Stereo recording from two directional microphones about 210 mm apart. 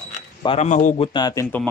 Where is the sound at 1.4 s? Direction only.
10° left (ahead or behind).